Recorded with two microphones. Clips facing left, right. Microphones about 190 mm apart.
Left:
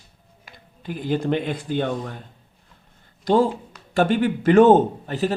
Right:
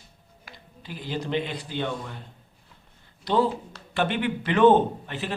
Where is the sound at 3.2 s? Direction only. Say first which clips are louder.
Left 5 dB; 45° left (ahead or behind).